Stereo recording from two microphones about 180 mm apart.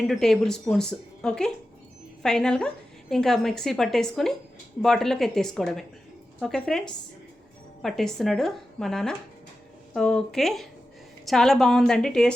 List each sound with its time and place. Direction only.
0.1 s a woman's voice: centre (ahead or behind)